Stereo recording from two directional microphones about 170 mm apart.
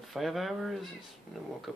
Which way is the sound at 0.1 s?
Centre (ahead or behind).